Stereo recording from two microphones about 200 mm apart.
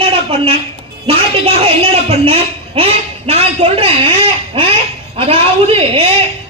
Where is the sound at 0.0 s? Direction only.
25° right (ahead or behind).